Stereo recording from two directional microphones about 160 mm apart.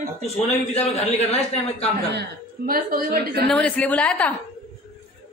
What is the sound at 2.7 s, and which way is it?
Speech, 65° right (ahead or behind).